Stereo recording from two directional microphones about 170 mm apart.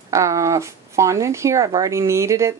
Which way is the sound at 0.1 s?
20° right (ahead or behind).